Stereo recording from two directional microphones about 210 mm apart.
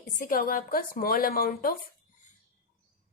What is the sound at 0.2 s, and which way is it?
A woman's voice, 40° left (ahead or behind).